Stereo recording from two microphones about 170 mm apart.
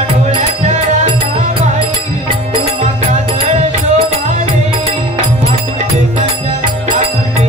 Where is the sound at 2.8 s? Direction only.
40° right (ahead or behind).